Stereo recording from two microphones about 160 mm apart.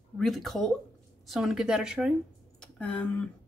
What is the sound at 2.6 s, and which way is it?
Speech, 5° left (ahead or behind).